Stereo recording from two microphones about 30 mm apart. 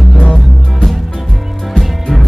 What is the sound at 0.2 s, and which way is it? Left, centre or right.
Music, left.